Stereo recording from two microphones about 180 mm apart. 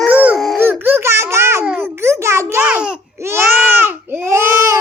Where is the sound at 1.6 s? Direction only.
10° right (ahead or behind).